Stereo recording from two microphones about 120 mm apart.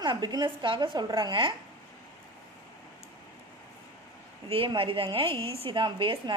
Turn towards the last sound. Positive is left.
turn(degrees=-45)  # may be behind; listen again after turning